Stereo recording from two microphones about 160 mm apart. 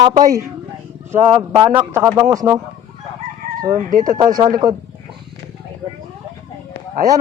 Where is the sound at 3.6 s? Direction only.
25° right (ahead or behind).